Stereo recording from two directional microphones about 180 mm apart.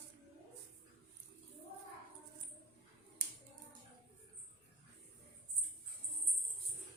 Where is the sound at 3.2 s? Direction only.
65° right (ahead or behind).